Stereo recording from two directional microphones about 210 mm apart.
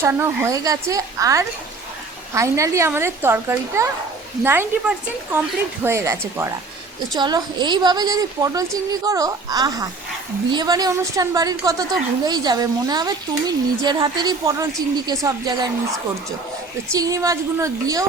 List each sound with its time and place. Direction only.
0.0 s a woman's voice: 10° right (ahead or behind)